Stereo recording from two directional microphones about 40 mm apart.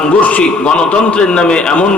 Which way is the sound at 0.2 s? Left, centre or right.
Left.